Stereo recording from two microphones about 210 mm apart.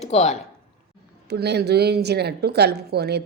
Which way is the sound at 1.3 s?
50° right (ahead or behind).